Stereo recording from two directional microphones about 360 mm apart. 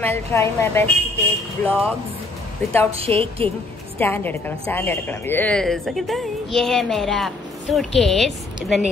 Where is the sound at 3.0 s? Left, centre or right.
Centre.